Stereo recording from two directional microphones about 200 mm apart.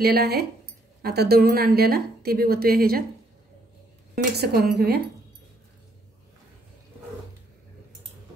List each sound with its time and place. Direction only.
0.0 s a woman's voice: 55° right (ahead or behind)
4.2 s a woman's voice: 50° right (ahead or behind)